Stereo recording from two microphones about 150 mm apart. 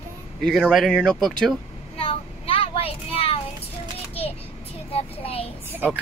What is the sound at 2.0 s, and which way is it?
Child singing, 40° left (ahead or behind).